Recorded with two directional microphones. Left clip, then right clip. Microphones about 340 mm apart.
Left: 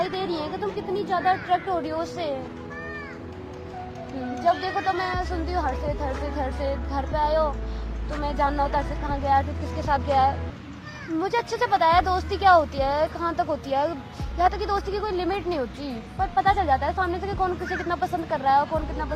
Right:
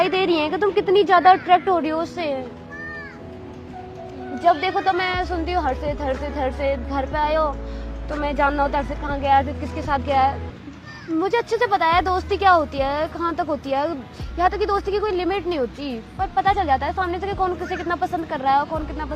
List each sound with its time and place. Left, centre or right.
0.0 s a sound: right
0.3 s speech: right
4.4 s speech: right
9.8 s speech: right